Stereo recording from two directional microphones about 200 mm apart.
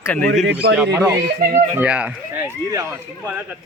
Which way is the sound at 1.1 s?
55° right (ahead or behind).